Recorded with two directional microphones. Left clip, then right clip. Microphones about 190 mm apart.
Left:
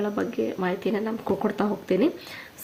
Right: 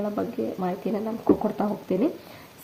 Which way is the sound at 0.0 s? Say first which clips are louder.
Left 1 dB; 20° left (ahead or behind).